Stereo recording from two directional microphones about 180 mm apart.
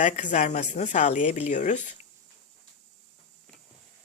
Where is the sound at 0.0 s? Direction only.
45° left (ahead or behind).